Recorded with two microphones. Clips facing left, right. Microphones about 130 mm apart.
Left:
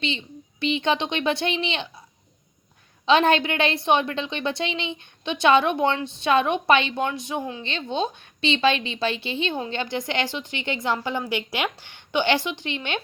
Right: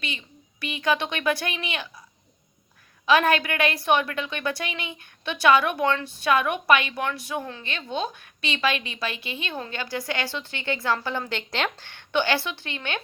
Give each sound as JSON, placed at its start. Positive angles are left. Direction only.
{"t": 0.0, "sound": "speech", "side_deg": 25}
{"t": 3.1, "sound": "a woman's voice", "side_deg": 25}